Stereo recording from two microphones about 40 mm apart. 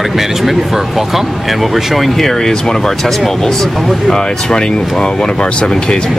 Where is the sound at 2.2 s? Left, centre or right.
Centre.